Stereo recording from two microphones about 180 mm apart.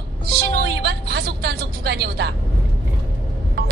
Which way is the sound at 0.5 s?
65° right (ahead or behind).